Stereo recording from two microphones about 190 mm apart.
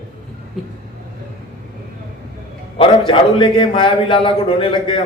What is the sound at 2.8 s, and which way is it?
A man's voice, 25° left (ahead or behind).